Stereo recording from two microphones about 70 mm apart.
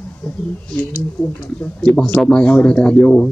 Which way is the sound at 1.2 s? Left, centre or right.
Centre.